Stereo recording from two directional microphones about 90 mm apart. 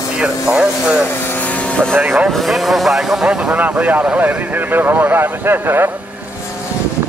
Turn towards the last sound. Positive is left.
turn(degrees=-25)  # may be behind; listen again after turning